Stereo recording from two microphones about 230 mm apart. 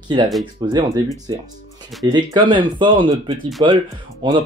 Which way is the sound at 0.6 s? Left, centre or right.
Centre.